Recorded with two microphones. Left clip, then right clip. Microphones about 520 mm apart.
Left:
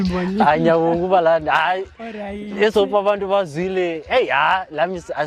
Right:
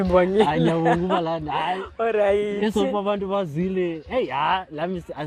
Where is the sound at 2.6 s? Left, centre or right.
Left.